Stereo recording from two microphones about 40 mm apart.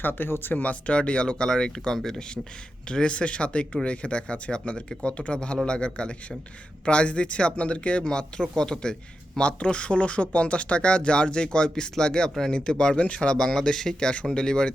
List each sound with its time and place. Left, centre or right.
0.0 s speech: left
0.5 s speech: left
8.0 s speech: centre